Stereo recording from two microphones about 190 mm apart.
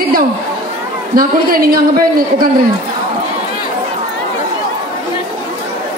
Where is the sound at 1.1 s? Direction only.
50° right (ahead or behind).